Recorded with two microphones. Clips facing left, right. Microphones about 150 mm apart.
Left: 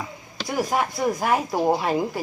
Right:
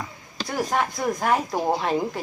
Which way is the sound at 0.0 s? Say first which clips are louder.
Left 1 dB; 10° left (ahead or behind).